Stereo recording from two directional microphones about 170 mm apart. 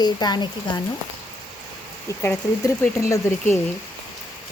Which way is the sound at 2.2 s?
15° left (ahead or behind).